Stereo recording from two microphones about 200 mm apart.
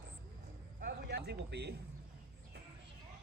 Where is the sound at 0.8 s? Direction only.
55° right (ahead or behind).